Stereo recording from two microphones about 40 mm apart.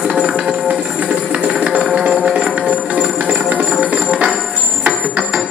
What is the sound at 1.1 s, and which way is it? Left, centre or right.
Music, right.